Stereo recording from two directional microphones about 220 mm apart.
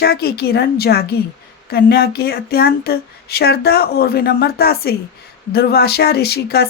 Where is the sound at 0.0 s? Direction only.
45° left (ahead or behind).